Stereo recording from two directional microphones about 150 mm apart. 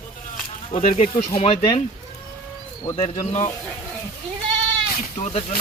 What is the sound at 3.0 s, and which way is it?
Speech, 40° left (ahead or behind).